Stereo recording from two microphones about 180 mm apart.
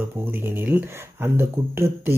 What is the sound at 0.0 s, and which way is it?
Speech, 15° right (ahead or behind).